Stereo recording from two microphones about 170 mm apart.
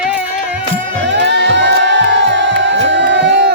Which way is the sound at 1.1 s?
90° right.